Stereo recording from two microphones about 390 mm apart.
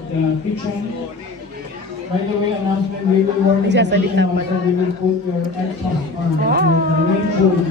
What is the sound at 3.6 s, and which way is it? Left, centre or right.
Speech, right.